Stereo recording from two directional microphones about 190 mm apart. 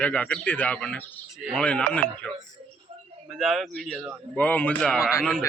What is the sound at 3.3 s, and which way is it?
A man's voice, centre (ahead or behind).